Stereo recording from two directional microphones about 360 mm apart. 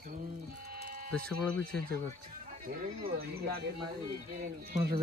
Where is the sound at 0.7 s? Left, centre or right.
Right.